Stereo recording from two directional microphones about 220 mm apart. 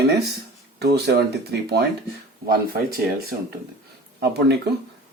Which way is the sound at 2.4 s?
45° right (ahead or behind).